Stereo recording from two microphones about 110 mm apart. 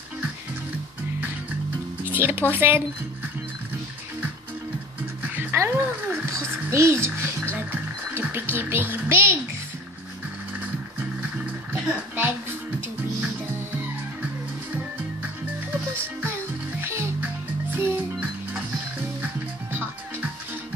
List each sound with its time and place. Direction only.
2.0 s speech: 20° right (ahead or behind)
5.2 s music: 20° right (ahead or behind)
11.7 s a woman's voice: 20° right (ahead or behind)
16.0 s music: 20° right (ahead or behind)
19.7 s music: 20° right (ahead or behind)